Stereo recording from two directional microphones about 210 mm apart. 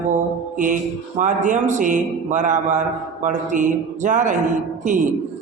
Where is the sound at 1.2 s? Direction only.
35° right (ahead or behind).